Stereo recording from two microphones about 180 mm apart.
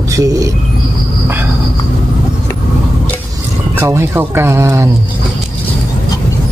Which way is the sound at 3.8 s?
15° right (ahead or behind).